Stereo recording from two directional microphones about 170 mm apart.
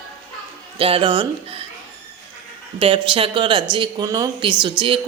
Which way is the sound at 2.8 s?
30° right (ahead or behind).